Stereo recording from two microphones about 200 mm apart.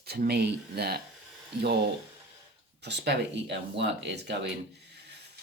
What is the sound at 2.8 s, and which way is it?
Speech, 60° right (ahead or behind).